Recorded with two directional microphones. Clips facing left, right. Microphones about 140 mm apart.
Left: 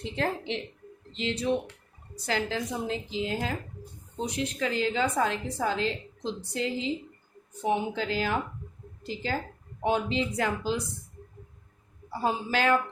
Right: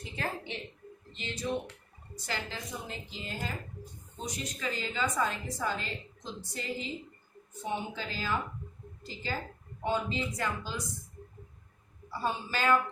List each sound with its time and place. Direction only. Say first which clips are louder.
0.0 s a woman's voice: left 7 dB; 90° left
9.8 s a woman's voice: left 5 dB; 90° left
12.2 s a woman's voice: left 5 dB; 90° left